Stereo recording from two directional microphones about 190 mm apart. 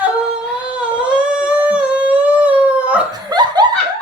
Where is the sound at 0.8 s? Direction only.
5° right (ahead or behind).